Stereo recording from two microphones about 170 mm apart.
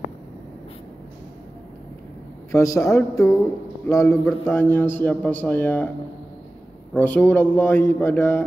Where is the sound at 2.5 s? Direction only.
20° left (ahead or behind).